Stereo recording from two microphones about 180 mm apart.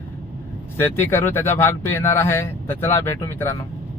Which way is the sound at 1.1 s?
10° left (ahead or behind).